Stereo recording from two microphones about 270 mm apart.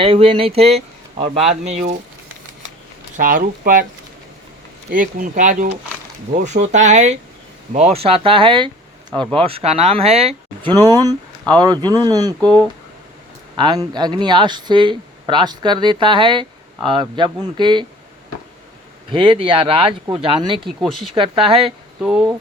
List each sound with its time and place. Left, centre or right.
0.0 s speech: centre
3.2 s speech: right
4.9 s speech: right; by 12.5 s centre
13.6 s speech: centre
19.1 s speech: centre
20.7 s speech: centre
21.2 s speech: centre
21.6 s speech: centre